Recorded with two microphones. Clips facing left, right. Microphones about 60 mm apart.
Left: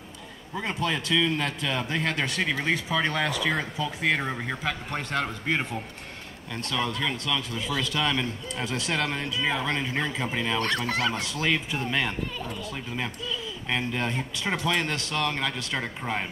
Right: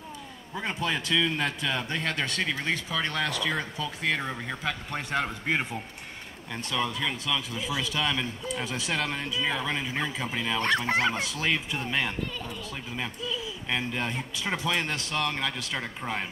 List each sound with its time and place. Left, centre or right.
0.6 s a man's voice: centre
4.6 s a man's voice: centre
10.9 s speech: right
11.1 s a man's voice: centre